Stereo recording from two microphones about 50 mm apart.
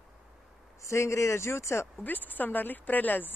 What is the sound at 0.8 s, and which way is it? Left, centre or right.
Speech, left.